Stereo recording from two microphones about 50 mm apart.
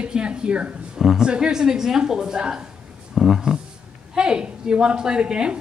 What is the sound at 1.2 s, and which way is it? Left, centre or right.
A woman's voice, centre.